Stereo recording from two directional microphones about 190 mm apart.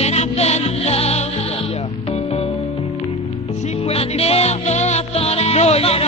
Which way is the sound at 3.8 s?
30° left (ahead or behind).